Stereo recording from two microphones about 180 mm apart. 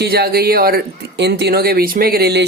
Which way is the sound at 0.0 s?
60° right (ahead or behind).